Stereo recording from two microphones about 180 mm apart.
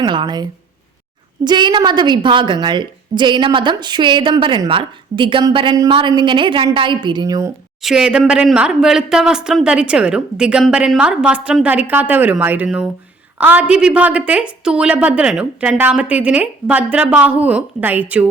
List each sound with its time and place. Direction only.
0.0 s a woman's voice: 25° right (ahead or behind)
1.5 s a woman's voice: 25° right (ahead or behind)
7.8 s a woman's voice: 5° right (ahead or behind)